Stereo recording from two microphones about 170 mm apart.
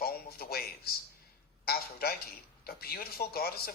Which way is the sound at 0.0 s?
65° left (ahead or behind).